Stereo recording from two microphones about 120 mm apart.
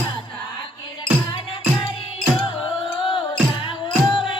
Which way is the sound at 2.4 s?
45° left (ahead or behind).